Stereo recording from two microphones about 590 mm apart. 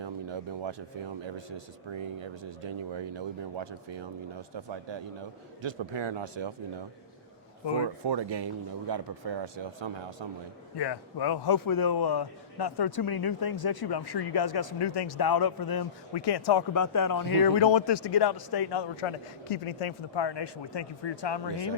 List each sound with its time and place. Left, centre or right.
0.0 s a sound: right
1.5 s speech: right
7.9 s speech: right
10.8 s a man's voice: left